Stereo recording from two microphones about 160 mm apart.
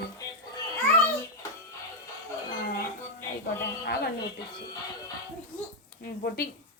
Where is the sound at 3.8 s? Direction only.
75° left (ahead or behind).